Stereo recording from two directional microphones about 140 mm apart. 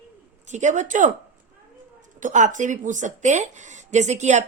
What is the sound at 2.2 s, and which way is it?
A woman's voice, 65° right (ahead or behind).